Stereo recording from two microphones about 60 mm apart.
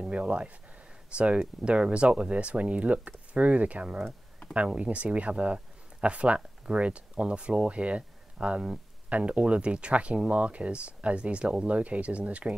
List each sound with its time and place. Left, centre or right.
0.0 s speech: centre